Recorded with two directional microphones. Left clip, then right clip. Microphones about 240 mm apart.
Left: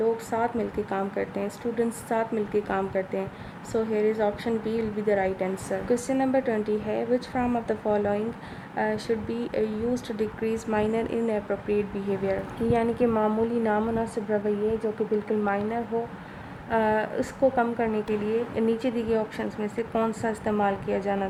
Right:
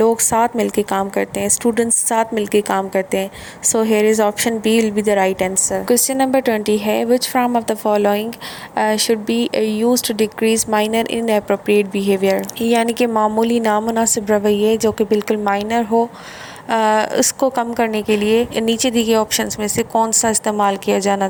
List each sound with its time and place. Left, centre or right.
0.0 s a woman's voice: right